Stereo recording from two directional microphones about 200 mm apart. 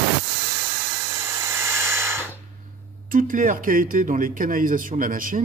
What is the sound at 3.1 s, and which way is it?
A man's voice, 40° right (ahead or behind).